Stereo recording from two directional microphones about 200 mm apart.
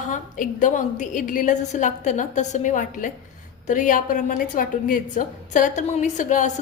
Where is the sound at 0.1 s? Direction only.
40° left (ahead or behind).